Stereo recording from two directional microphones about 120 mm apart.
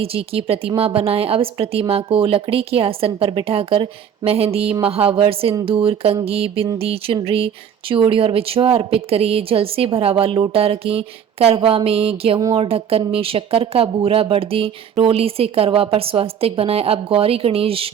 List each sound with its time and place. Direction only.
0.0 s speech: 50° right (ahead or behind)